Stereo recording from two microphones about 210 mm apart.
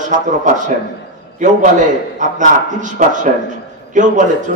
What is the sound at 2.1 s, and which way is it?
A man's voice, 35° right (ahead or behind).